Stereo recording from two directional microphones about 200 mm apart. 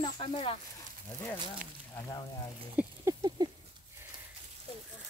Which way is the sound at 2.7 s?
20° right (ahead or behind).